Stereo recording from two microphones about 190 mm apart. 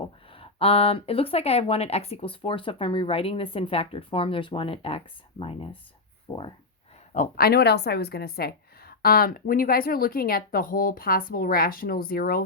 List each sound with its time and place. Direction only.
0.3 s speech: 30° left (ahead or behind)
7.1 s a woman's voice: 45° left (ahead or behind)